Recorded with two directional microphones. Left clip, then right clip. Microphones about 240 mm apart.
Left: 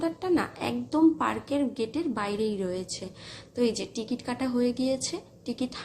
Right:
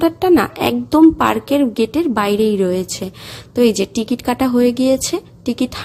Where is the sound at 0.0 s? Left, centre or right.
Right.